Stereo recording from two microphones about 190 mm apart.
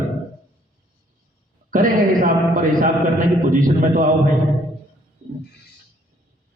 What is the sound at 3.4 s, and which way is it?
Speech, 45° right (ahead or behind).